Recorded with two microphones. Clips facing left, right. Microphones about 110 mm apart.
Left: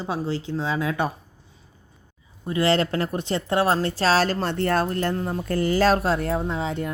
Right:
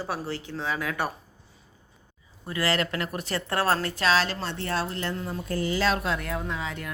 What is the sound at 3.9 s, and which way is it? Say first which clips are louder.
A woman's voice: left 4 dB; 35° left (ahead or behind).